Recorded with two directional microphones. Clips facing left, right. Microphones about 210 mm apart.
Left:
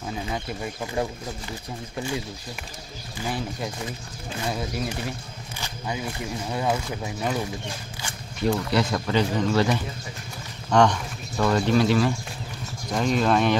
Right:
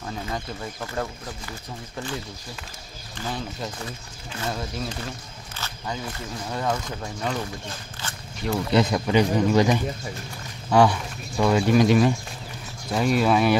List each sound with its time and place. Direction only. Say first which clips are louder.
0.0 s speech: left 1 dB; 10° left (ahead or behind)
3.2 s speech: left 2 dB; 10° left (ahead or behind)
8.0 s a sound: right 1 dB; 15° left (ahead or behind)
8.7 s speech: right 3 dB; 15° right (ahead or behind)